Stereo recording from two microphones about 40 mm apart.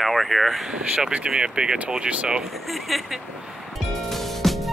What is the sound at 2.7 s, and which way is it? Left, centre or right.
Speech, centre.